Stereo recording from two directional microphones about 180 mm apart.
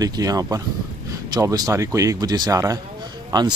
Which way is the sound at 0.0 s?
20° right (ahead or behind).